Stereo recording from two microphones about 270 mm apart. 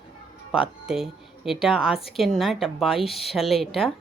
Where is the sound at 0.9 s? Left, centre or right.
Centre.